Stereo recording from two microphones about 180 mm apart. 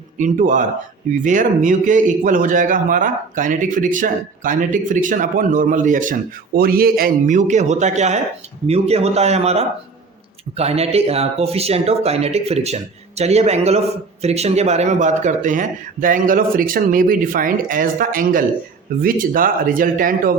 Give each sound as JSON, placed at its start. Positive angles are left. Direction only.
{"t": 0.2, "sound": "a man's voice", "side_deg": -45}
{"t": 6.6, "sound": "a man's voice", "side_deg": -55}